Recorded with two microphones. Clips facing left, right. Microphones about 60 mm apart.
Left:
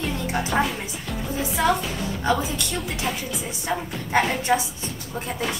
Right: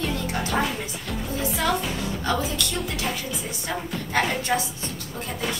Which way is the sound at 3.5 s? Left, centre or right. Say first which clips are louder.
Left 4 dB; left.